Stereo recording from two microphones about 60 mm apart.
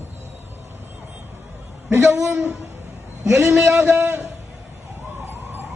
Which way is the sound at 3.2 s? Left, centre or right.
Right.